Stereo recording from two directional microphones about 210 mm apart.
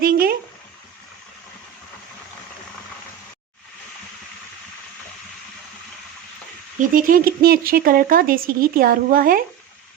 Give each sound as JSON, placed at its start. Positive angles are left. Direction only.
{"t": 0.0, "sound": "speech", "side_deg": -45}
{"t": 6.9, "sound": "speech", "side_deg": -45}